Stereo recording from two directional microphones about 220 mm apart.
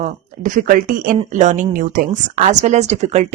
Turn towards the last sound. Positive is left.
turn(degrees=-30)  # may be behind; listen again after turning